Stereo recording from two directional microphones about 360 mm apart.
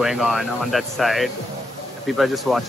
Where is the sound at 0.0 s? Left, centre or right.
Centre.